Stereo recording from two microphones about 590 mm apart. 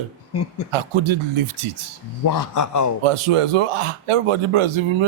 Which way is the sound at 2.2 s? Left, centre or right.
Left.